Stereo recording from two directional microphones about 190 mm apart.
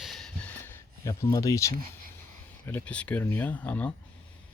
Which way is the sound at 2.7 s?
10° left (ahead or behind).